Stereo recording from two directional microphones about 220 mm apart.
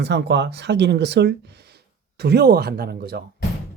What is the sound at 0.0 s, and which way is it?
Speech, 50° right (ahead or behind).